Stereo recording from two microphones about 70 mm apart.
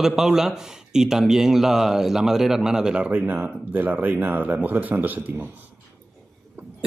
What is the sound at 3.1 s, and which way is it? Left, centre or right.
Speech, right.